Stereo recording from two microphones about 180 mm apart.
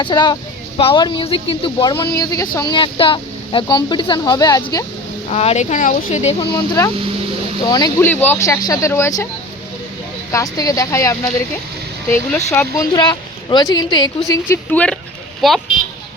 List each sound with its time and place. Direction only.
0.0 s speech: 25° left (ahead or behind)
5.3 s speech: 35° left (ahead or behind)
6.5 s speech: 15° left (ahead or behind)
10.3 s a woman's voice: 20° left (ahead or behind); by 15.6 s centre (ahead or behind)